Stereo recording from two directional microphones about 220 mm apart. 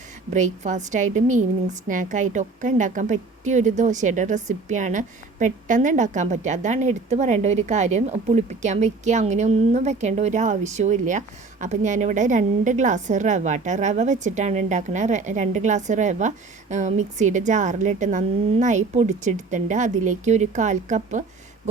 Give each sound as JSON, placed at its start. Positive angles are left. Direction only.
{"t": 0.3, "sound": "a woman's voice", "side_deg": -35}